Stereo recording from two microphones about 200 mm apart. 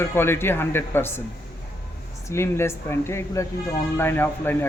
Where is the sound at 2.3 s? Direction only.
15° left (ahead or behind).